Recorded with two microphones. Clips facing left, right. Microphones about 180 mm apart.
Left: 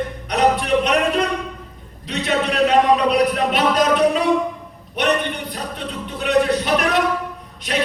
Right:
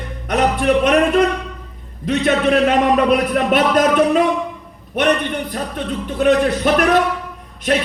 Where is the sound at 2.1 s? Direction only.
55° right (ahead or behind).